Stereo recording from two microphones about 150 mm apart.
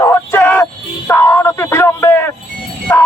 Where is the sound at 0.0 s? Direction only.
20° left (ahead or behind).